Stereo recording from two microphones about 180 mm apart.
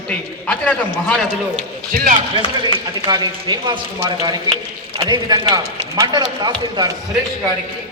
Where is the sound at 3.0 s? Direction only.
25° right (ahead or behind).